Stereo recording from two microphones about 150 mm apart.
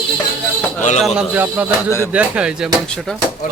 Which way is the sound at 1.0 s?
5° right (ahead or behind).